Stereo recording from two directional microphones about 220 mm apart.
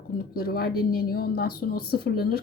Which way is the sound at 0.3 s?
45° left (ahead or behind).